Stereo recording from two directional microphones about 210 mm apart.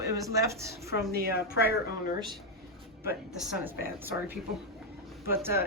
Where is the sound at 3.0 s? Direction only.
5° right (ahead or behind).